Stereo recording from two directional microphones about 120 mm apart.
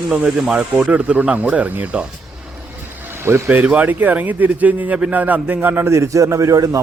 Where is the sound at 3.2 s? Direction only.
20° right (ahead or behind).